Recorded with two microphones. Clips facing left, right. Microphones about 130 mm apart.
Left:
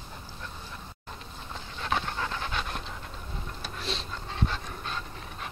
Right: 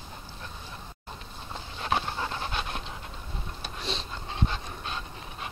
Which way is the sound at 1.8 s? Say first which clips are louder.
Right 1 dB; 30° right (ahead or behind).